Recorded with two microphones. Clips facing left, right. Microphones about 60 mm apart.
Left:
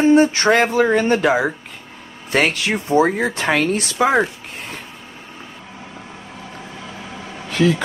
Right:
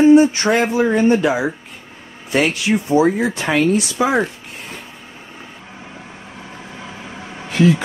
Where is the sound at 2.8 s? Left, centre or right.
Left.